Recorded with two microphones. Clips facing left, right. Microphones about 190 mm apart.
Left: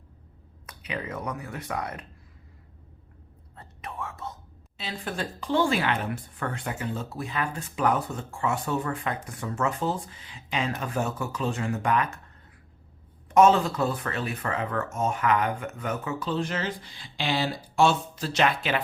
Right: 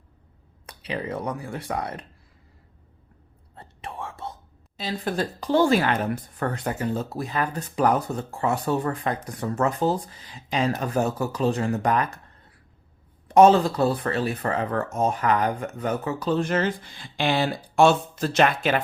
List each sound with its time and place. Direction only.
0.7 s speech: 30° right (ahead or behind)
3.5 s whispering: 30° right (ahead or behind)
4.8 s speech: 40° right (ahead or behind)
13.2 s speech: 35° right (ahead or behind)